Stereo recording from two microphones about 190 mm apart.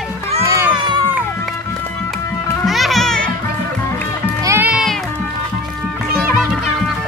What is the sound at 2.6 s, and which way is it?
Music, centre (ahead or behind).